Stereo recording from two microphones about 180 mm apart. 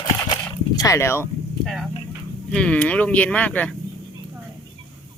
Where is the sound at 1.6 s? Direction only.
Centre (ahead or behind).